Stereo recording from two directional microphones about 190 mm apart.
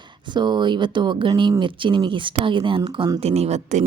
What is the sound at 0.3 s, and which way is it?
Speech, 25° right (ahead or behind).